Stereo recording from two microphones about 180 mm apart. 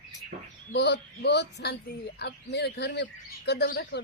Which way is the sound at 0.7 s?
70° left (ahead or behind).